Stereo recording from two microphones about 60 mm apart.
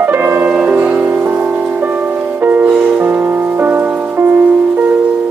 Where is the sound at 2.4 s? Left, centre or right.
Right.